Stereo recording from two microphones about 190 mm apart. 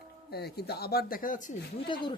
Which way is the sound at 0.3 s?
60° left (ahead or behind).